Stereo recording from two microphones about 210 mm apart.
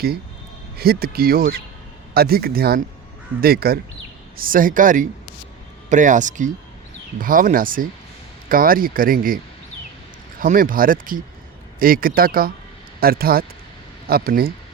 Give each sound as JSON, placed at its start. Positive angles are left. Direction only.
{"t": 0.8, "sound": "speech", "side_deg": -45}
{"t": 10.4, "sound": "speech", "side_deg": -40}